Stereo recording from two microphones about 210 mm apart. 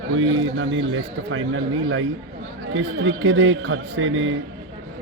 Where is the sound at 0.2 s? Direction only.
65° right (ahead or behind).